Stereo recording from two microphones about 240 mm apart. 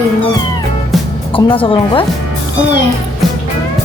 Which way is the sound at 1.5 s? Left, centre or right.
Left.